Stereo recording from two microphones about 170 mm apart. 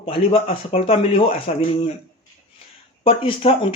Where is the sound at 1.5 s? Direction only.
40° left (ahead or behind).